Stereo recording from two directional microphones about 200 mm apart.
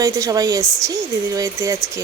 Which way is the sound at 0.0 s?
15° right (ahead or behind).